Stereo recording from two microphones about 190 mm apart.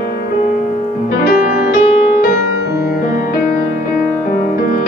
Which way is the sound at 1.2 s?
50° left (ahead or behind).